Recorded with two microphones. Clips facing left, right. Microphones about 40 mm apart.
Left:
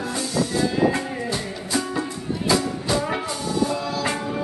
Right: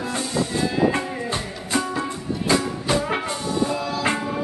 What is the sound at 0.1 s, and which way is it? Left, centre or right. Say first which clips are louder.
Music: left 1 dB; right.